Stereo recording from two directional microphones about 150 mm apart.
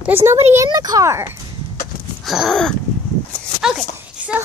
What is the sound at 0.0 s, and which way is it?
Speech, 15° right (ahead or behind).